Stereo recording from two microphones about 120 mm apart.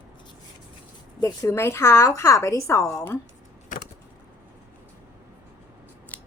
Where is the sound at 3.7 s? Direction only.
90° left.